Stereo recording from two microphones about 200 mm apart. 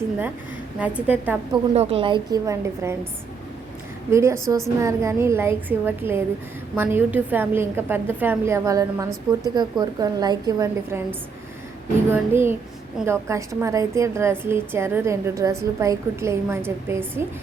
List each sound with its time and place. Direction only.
0.8 s a woman's voice: 5° right (ahead or behind)
1.7 s a woman's voice: 30° right (ahead or behind); by 3.1 s 15° right (ahead or behind)
4.1 s a woman's voice: 15° right (ahead or behind)
12.1 s a woman's voice: 10° right (ahead or behind)